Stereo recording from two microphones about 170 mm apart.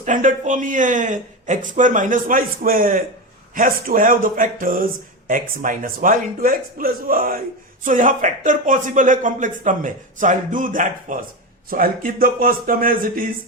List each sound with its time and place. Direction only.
0.0 s speech: 50° right (ahead or behind)